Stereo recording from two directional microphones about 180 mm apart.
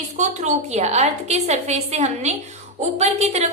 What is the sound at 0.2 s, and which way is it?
A woman's voice, 40° right (ahead or behind).